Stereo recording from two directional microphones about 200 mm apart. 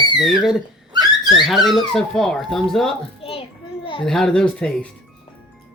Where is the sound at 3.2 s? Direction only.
30° left (ahead or behind).